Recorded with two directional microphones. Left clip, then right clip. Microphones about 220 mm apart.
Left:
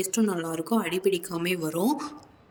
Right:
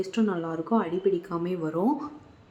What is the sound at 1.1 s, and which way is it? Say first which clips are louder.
Speech: left 1 dB; 50° left (ahead or behind).